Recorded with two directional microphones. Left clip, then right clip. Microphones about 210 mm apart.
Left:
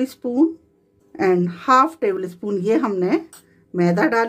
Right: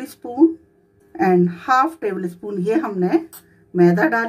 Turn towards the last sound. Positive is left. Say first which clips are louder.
# right 2 dB
turn(degrees=45)  # may be behind; listen again after turning